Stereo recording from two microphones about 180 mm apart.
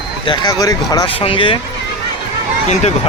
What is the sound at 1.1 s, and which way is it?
Speech, 30° left (ahead or behind).